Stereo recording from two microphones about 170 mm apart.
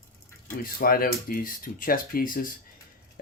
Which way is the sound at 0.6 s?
55° left (ahead or behind).